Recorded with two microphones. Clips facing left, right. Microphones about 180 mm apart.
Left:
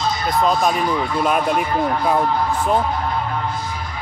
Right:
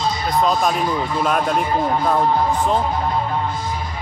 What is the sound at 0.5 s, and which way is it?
Speech, centre (ahead or behind).